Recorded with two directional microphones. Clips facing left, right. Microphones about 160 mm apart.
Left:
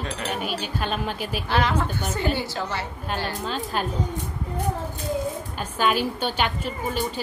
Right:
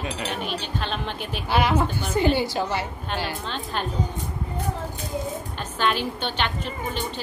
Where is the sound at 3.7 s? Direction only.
5° left (ahead or behind).